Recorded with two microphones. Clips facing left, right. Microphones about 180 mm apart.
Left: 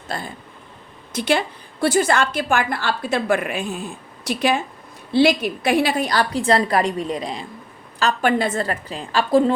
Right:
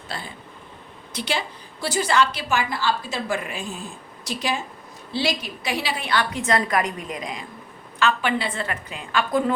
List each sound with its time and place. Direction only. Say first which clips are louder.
0.1 s a woman's voice: left 5 dB; 45° left (ahead or behind)